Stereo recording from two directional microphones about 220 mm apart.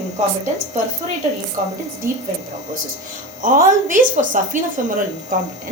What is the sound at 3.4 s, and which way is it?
Speech, 35° right (ahead or behind).